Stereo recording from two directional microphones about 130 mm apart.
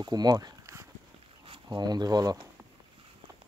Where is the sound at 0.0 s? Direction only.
30° right (ahead or behind).